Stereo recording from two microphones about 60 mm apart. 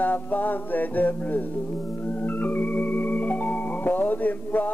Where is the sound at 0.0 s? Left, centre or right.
Left.